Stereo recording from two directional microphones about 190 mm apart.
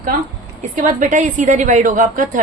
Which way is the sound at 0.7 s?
40° right (ahead or behind).